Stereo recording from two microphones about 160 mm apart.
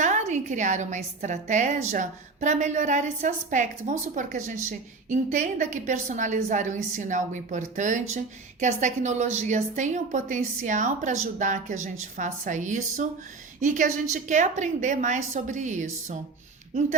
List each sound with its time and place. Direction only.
0.0 s a woman's voice: 50° right (ahead or behind)